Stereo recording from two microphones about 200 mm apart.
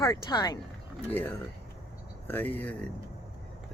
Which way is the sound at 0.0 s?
20° left (ahead or behind).